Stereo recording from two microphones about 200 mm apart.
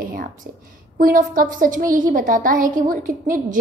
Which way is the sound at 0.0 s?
45° right (ahead or behind).